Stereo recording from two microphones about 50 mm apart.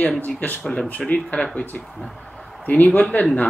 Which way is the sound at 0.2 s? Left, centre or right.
Left.